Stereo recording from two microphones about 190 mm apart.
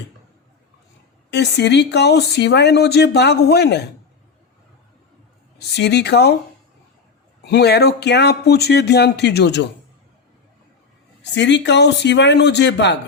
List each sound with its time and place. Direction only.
1.3 s speech: 65° left (ahead or behind)
5.5 s speech: 60° left (ahead or behind)
7.4 s speech: 60° left (ahead or behind)
11.2 s speech: 65° left (ahead or behind)